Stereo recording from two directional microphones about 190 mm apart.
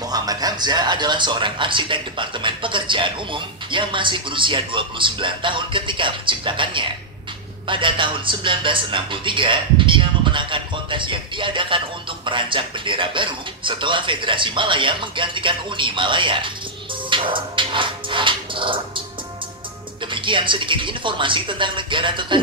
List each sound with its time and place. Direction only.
0.1 s speech: 20° right (ahead or behind)
17.1 s music: 25° right (ahead or behind)
20.1 s speech: 25° right (ahead or behind)